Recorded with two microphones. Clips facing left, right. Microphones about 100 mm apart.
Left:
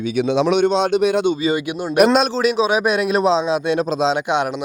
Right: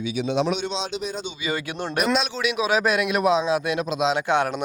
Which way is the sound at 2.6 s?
20° left (ahead or behind).